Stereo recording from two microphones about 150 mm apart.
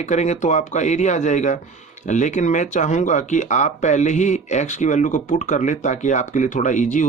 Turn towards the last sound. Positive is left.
turn(degrees=55)  # may be behind; listen again after turning